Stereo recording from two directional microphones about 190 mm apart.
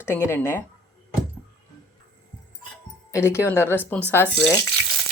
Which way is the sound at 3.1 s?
15° left (ahead or behind).